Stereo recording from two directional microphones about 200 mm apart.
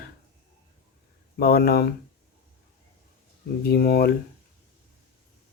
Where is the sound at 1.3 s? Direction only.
50° left (ahead or behind).